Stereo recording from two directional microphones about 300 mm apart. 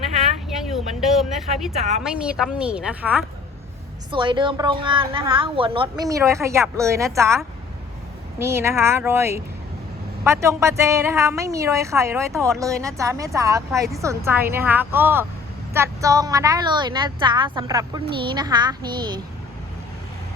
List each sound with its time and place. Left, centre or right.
0.2 s a sound: centre
1.7 s a woman's voice: right
2.0 s a woman's voice: centre
4.1 s a woman's voice: centre
8.4 s a woman's voice: centre